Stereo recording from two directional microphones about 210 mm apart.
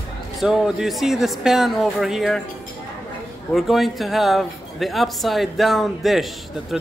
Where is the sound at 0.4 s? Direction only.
Centre (ahead or behind).